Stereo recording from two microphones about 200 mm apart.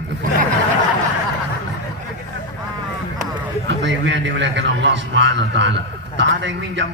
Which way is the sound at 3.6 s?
65° right (ahead or behind).